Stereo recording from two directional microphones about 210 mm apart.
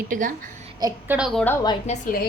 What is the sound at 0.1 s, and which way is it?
Speech, 40° right (ahead or behind).